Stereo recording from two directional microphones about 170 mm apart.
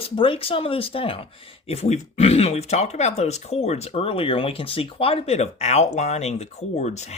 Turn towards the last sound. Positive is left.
turn(degrees=40)  # may be behind; listen again after turning